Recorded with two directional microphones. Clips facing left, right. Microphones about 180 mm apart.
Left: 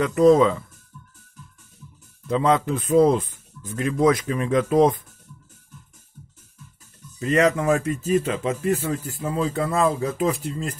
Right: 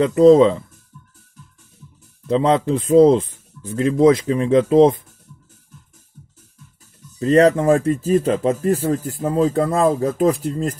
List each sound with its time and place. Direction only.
0.0 s speech: 25° right (ahead or behind)
2.2 s speech: 30° right (ahead or behind)
7.2 s speech: 35° right (ahead or behind)